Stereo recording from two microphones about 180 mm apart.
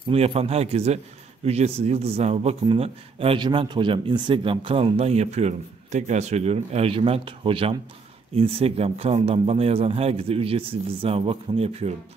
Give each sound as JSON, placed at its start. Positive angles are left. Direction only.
{"t": 0.1, "sound": "a man's voice", "side_deg": -35}